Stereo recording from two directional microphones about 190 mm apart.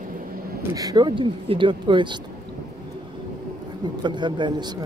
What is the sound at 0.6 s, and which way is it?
Speech, 20° right (ahead or behind).